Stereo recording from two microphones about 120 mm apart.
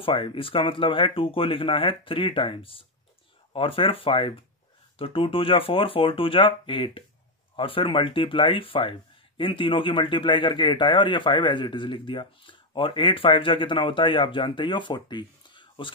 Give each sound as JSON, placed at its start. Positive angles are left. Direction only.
{"t": 0.0, "sound": "speech", "side_deg": 45}